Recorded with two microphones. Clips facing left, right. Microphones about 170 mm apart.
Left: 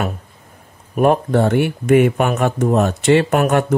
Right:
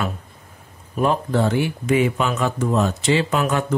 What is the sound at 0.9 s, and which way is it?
Speech, 55° left (ahead or behind).